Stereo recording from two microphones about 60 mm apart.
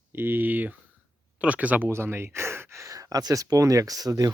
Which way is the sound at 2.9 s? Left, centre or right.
Right.